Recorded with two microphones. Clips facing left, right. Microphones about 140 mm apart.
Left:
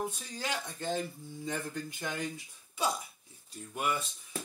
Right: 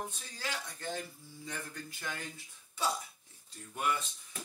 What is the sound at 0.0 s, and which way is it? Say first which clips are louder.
Speech: left 5 dB; 20° left (ahead or behind).